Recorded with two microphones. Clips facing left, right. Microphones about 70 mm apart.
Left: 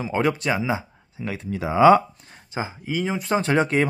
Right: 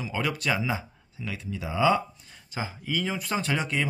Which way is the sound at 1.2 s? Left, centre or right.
Left.